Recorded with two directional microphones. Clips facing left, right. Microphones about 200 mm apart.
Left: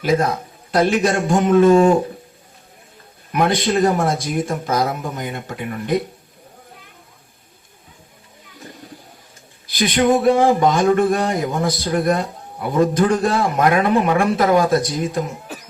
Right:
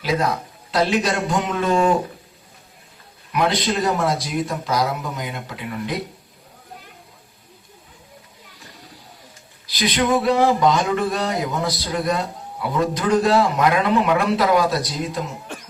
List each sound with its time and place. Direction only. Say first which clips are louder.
0.0 s speech: left 4 dB; 50° left (ahead or behind)
3.3 s speech: left 3 dB; 50° left (ahead or behind)
9.6 s speech: left 4 dB; 50° left (ahead or behind)
15.5 s cough: left 1 dB; 5° left (ahead or behind)